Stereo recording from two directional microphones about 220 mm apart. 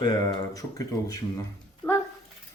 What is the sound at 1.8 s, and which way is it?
Speech, 5° left (ahead or behind).